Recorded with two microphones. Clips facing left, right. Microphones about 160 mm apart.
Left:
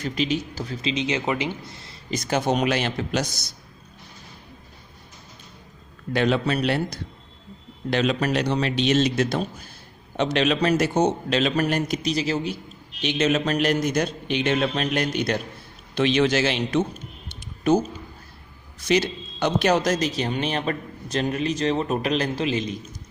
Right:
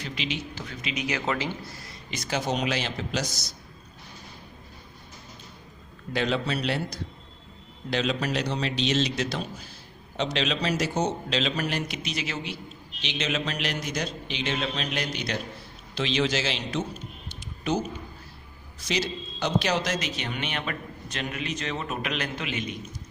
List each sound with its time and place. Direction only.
0.0 s speech: 40° left (ahead or behind); by 2.0 s 25° left (ahead or behind)
2.0 s a man's voice: 45° left (ahead or behind)
6.1 s a man's voice: 55° left (ahead or behind); by 12.5 s 40° left (ahead or behind)
13.0 s a man's voice: 50° left (ahead or behind)
17.2 s a sound: 45° left (ahead or behind)
18.9 s a man's voice: 55° left (ahead or behind); by 22.8 s 30° left (ahead or behind)